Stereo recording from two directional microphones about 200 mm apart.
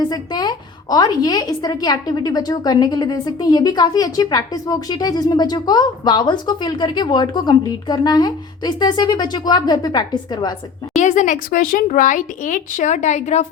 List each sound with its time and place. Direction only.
0.1 s a woman's voice: 20° left (ahead or behind)
11.0 s speech: 40° left (ahead or behind)